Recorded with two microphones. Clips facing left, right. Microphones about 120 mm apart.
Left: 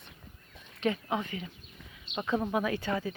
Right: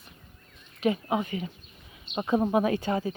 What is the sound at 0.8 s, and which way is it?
Speech, 15° right (ahead or behind).